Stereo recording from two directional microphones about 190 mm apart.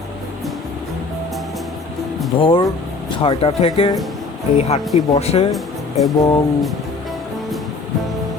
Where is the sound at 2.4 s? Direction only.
25° left (ahead or behind).